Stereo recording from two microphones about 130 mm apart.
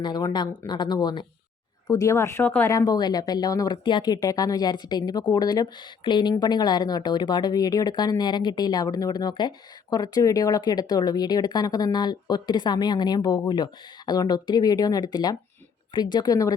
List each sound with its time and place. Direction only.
0.0 s speech: 35° left (ahead or behind)
1.9 s speech: 25° left (ahead or behind)